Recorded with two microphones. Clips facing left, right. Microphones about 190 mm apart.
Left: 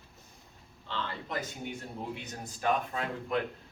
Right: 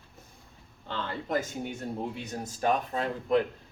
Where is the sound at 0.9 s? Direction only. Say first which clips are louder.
Right 5 dB; 45° right (ahead or behind).